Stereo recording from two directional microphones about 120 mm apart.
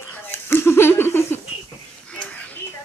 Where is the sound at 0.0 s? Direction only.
20° left (ahead or behind).